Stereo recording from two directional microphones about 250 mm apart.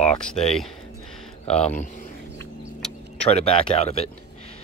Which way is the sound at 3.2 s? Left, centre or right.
Left.